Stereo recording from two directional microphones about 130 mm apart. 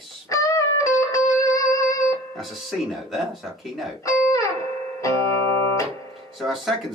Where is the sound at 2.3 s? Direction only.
Centre (ahead or behind).